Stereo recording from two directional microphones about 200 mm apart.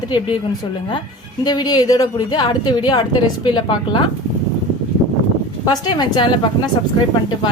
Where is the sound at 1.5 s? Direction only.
20° left (ahead or behind).